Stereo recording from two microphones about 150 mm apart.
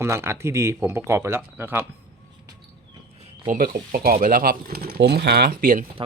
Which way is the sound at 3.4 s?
70° right (ahead or behind).